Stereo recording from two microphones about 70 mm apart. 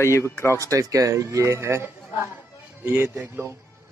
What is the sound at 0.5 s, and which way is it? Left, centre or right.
Speech, right.